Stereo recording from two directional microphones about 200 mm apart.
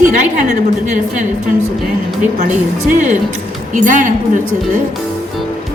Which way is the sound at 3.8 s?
40° right (ahead or behind).